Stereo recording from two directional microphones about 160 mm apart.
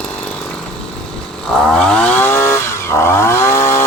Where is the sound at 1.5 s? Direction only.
Centre (ahead or behind); by 3.8 s 15° left (ahead or behind).